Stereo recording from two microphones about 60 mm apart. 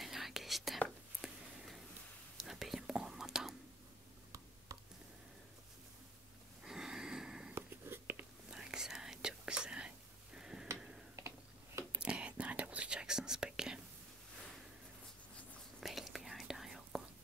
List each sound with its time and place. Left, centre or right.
0.0 s whispering: centre
1.2 s a sound: centre
2.3 s whispering: centre
4.7 s a sound: right
6.6 s sniff: centre
7.5 s whispering: right
8.5 s whispering: centre
11.1 s tick-tock: right
12.0 s whispering: centre
15.8 s whispering: centre